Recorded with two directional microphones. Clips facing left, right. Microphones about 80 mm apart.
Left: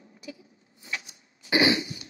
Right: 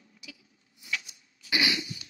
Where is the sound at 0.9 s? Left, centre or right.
Left.